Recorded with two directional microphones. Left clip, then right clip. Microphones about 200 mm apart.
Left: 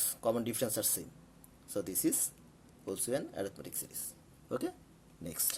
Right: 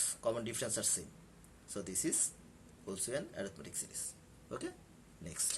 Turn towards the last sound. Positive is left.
turn(degrees=50)  # may be behind; listen again after turning